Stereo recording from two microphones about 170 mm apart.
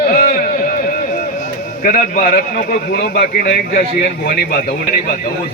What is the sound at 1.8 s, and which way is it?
A man's voice, 60° left (ahead or behind).